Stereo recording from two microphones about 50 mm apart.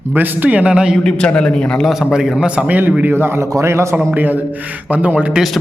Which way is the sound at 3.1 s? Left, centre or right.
Right.